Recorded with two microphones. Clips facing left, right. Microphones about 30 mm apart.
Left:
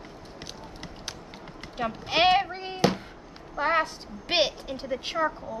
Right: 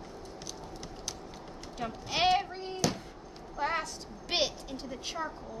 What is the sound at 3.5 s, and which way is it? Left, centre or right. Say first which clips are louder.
A woman's voice: left 7 dB; left.